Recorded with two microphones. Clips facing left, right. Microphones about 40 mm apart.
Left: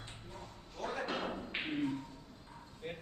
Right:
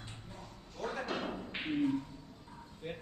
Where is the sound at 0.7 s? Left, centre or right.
Centre.